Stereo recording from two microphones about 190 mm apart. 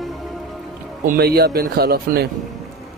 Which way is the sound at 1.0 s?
55° right (ahead or behind).